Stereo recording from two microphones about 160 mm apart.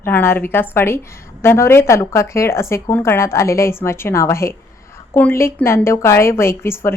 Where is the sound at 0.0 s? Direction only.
15° left (ahead or behind).